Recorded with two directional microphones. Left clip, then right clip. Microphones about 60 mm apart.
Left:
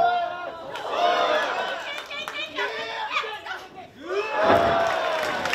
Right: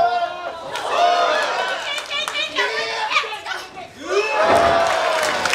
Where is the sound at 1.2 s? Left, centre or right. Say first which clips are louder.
Right 4 dB; centre.